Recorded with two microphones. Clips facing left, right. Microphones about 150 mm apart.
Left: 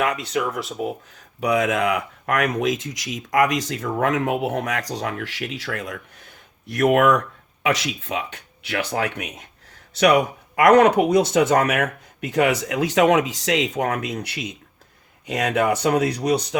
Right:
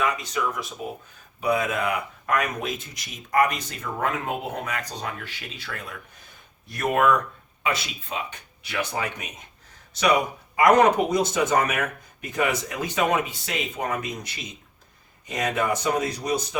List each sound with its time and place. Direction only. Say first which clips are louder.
0.0 s speech: left 3 dB; 70° left (ahead or behind)
1.4 s speech: left 4 dB; 90° left
6.7 s speech: left 5 dB; 75° left (ahead or behind)
7.6 s speech: left 5 dB; 85° left; by 16.6 s 70° left (ahead or behind)